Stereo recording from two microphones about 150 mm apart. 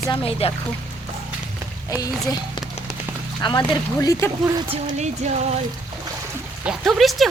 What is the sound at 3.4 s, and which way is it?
Speech, 30° left (ahead or behind).